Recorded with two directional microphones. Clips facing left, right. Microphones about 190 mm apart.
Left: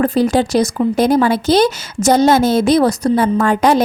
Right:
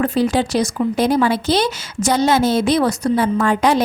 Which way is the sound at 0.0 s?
40° left (ahead or behind).